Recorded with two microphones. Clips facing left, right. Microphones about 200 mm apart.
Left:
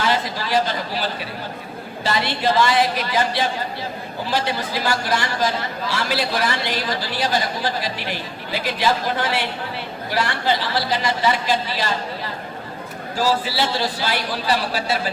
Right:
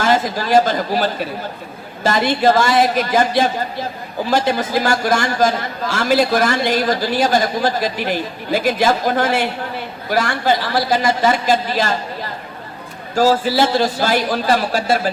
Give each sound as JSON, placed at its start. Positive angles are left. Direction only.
{"t": 0.0, "sound": "a man's voice", "side_deg": -45}